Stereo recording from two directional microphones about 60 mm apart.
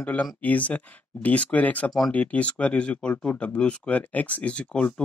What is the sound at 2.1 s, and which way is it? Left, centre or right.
Speech, left.